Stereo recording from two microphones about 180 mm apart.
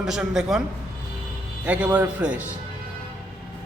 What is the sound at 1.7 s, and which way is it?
Speech, 10° right (ahead or behind).